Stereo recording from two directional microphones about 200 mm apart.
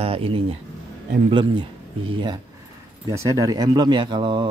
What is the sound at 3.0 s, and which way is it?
Speech, 20° right (ahead or behind).